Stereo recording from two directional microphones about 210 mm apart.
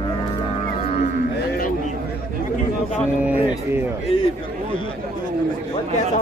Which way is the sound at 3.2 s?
10° right (ahead or behind).